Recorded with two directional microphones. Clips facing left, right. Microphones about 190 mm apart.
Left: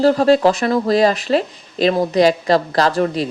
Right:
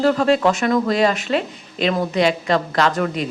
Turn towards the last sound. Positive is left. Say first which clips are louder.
# left 3 dB
turn(degrees=35)  # may be behind; listen again after turning